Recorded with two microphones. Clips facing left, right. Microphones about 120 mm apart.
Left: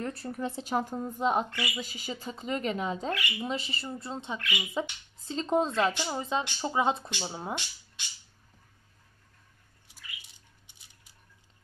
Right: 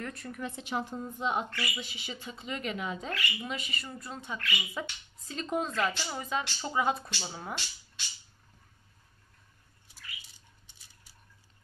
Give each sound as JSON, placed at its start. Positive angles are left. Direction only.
{"t": 0.0, "sound": "a woman's voice", "side_deg": 35}